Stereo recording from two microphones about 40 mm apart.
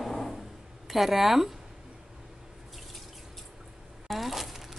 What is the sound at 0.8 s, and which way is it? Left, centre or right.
Speech, centre.